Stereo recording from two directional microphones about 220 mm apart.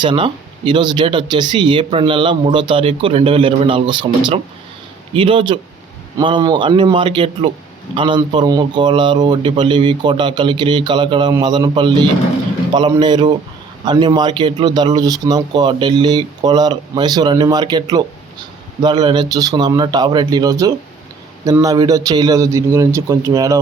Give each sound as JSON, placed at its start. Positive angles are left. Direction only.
{"t": 0.0, "sound": "a man's voice", "side_deg": -20}